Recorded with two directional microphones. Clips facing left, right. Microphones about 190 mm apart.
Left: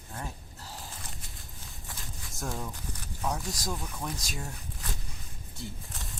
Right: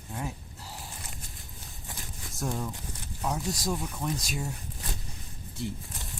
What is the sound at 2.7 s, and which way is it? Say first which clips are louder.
Speech: right 2 dB; 20° right (ahead or behind).